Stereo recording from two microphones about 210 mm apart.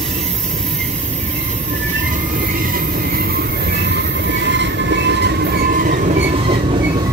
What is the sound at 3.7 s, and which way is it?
Train, 55° right (ahead or behind).